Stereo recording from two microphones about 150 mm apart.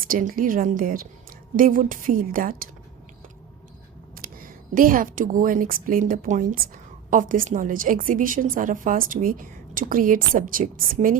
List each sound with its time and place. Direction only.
0.0 s a woman's voice: 65° right (ahead or behind)
4.2 s a woman's voice: 70° right (ahead or behind)